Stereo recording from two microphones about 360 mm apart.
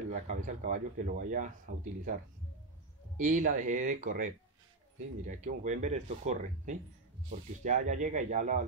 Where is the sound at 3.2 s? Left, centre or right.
Right.